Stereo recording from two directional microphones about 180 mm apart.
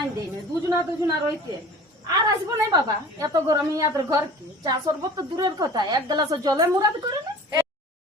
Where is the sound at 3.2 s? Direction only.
20° right (ahead or behind).